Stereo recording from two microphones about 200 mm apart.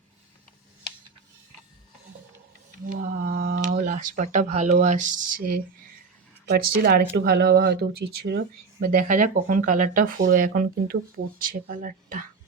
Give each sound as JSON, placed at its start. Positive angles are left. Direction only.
{"t": 2.8, "sound": "speech", "side_deg": -45}